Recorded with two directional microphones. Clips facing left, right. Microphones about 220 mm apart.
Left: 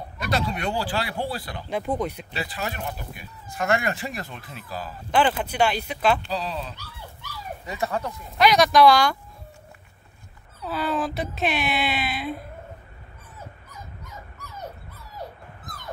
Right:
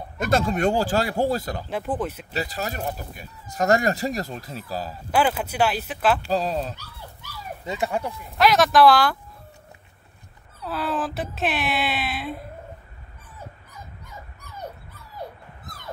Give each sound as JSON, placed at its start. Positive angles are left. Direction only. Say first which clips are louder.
{"t": 0.2, "sound": "speech", "louder": "right 6 dB", "side_deg": -45}
{"t": 1.7, "sound": "speech", "louder": "left 2 dB", "side_deg": -5}
{"t": 2.3, "sound": "speech", "louder": "right 3 dB", "side_deg": -40}
{"t": 5.1, "sound": "speech", "louder": "even", "side_deg": -5}
{"t": 6.2, "sound": "speech", "louder": "right 6 dB", "side_deg": -45}
{"t": 7.6, "sound": "speech", "louder": "right 2 dB", "side_deg": -15}
{"t": 8.4, "sound": "speech", "louder": "even", "side_deg": 0}
{"t": 10.6, "sound": "speech", "louder": "left 1 dB", "side_deg": 0}